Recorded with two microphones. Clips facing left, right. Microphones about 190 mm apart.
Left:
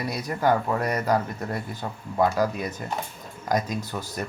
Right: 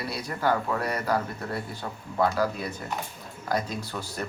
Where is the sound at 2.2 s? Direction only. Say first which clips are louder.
Left 2 dB; 15° left (ahead or behind).